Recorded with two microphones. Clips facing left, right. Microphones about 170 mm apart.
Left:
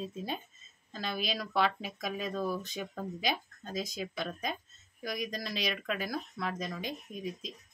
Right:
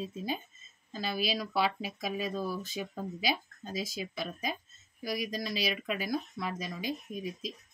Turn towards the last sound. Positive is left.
turn(degrees=-5)  # may be behind; listen again after turning